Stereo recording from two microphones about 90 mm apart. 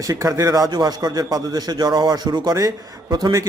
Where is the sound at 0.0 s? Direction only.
40° right (ahead or behind).